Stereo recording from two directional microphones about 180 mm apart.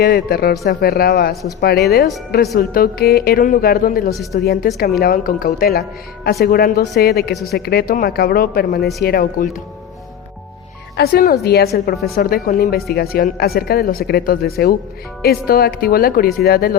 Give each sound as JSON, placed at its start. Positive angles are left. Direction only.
{"t": 0.0, "sound": "speech", "side_deg": 55}
{"t": 10.9, "sound": "speech", "side_deg": 60}